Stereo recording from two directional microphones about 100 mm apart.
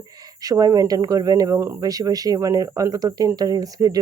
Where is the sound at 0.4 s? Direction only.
35° right (ahead or behind).